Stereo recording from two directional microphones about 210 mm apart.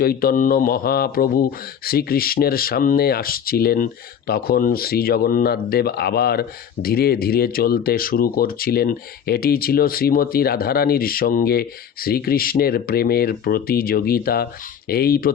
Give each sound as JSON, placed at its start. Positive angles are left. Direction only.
{"t": 0.0, "sound": "speech", "side_deg": 45}